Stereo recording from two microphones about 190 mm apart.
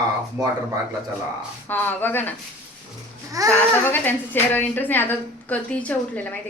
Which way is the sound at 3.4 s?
20° right (ahead or behind).